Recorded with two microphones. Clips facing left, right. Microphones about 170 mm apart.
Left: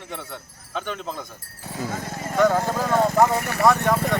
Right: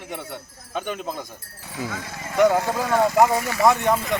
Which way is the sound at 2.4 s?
15° right (ahead or behind).